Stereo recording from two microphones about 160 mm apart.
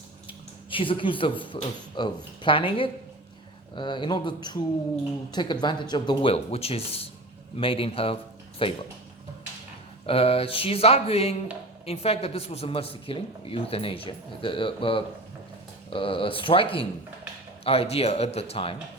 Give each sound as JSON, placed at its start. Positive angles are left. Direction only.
{"t": 0.3, "sound": "a sound", "side_deg": 35}
{"t": 2.0, "sound": "a man's voice", "side_deg": 30}
{"t": 10.1, "sound": "speech", "side_deg": 35}